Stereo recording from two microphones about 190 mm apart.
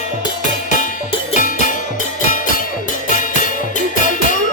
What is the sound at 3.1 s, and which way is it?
Music, 40° left (ahead or behind).